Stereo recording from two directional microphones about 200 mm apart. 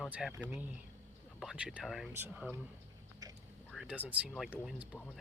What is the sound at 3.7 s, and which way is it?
Speech, 5° right (ahead or behind).